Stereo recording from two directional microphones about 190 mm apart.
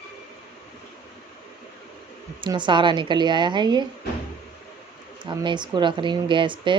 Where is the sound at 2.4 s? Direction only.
25° right (ahead or behind).